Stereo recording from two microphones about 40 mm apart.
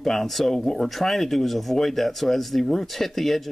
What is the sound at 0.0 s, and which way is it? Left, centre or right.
Speech, centre.